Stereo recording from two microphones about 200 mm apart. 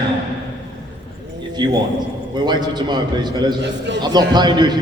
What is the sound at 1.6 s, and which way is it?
A man's voice, 20° right (ahead or behind).